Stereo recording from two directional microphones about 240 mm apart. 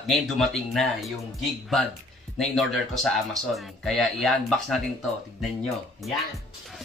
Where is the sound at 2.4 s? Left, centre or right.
Centre.